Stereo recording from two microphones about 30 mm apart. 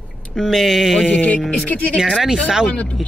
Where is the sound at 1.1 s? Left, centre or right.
Left.